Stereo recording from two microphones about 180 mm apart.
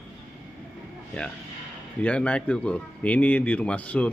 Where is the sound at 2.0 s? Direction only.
5° left (ahead or behind).